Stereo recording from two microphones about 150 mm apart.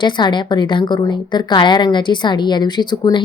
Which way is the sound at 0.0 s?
30° left (ahead or behind).